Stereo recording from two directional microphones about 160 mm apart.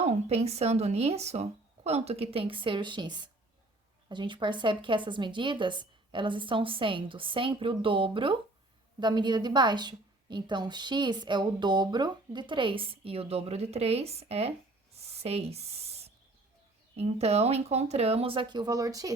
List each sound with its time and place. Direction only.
0.0 s a woman's voice: 45° right (ahead or behind)
14.9 s writing: 40° right (ahead or behind)
17.0 s a woman's voice: 40° right (ahead or behind); by 19.1 s 20° right (ahead or behind)